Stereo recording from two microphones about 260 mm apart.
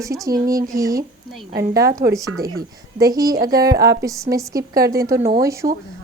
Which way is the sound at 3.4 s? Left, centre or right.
Right.